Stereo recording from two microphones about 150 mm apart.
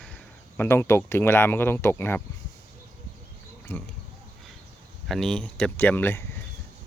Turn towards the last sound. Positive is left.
turn(degrees=15)  # may be behind; listen again after turning